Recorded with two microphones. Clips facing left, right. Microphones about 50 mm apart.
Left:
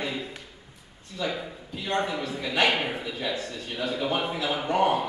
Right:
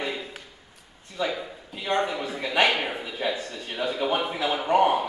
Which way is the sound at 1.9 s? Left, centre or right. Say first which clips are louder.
Right 2 dB; centre.